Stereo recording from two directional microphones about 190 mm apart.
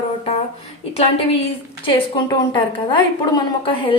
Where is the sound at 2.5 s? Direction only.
25° left (ahead or behind).